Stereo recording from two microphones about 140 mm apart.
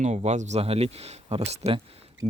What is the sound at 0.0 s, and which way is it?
Speech, 55° right (ahead or behind).